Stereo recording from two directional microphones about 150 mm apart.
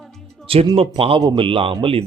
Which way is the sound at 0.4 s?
40° right (ahead or behind).